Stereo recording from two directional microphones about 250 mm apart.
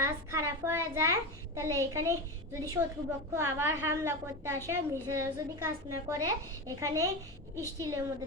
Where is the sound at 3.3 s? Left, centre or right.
Centre.